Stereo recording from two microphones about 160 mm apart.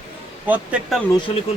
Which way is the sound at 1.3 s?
35° left (ahead or behind).